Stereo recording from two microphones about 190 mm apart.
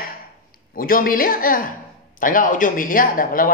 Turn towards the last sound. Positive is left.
turn(degrees=45)  # may be behind; listen again after turning